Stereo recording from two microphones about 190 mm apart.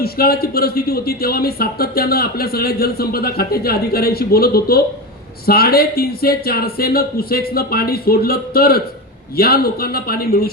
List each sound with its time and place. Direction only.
0.0 s a man's voice: 55° left (ahead or behind)